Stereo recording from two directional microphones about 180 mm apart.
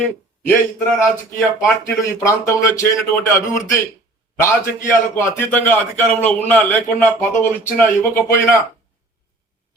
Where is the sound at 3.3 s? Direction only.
15° left (ahead or behind).